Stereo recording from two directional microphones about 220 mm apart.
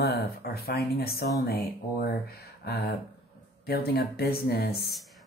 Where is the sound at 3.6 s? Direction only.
45° left (ahead or behind).